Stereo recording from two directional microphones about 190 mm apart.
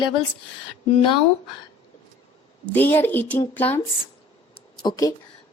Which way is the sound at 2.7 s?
10° left (ahead or behind).